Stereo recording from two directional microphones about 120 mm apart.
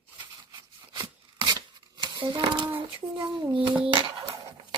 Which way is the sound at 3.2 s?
40° right (ahead or behind).